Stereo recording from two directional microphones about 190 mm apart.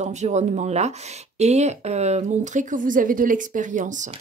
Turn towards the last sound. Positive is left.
turn(degrees=-40)  # may be behind; listen again after turning